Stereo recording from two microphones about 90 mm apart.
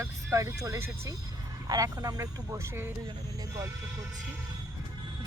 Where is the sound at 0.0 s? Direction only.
30° right (ahead or behind).